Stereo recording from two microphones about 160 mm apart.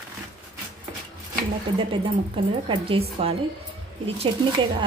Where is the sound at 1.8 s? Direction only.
35° right (ahead or behind).